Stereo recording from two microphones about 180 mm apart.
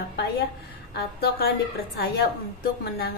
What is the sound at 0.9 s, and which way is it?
A woman's voice, 60° left (ahead or behind).